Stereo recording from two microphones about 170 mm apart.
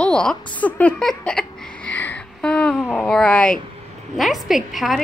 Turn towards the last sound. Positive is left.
turn(degrees=0)  # may be behind; listen again after turning